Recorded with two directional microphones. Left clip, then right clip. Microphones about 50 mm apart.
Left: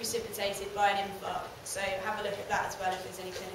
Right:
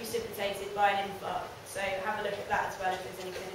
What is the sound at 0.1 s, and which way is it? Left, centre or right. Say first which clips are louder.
A woman's voice: right 2 dB; left.